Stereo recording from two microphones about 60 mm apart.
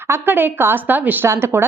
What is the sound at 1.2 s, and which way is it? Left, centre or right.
Speech, right.